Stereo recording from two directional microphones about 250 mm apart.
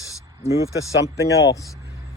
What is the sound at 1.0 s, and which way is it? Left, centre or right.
Speech, centre.